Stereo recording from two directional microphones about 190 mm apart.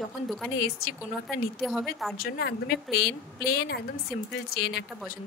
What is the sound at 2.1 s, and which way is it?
A woman's voice, 50° left (ahead or behind).